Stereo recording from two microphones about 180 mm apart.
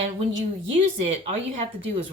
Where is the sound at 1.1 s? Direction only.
35° right (ahead or behind).